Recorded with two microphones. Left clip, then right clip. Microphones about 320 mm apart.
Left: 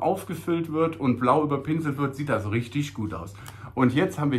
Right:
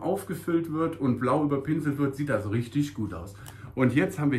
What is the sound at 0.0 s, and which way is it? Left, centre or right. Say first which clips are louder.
A man's voice: left 4 dB; centre.